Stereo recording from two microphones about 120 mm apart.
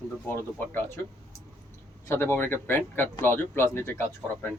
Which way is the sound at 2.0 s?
20° left (ahead or behind).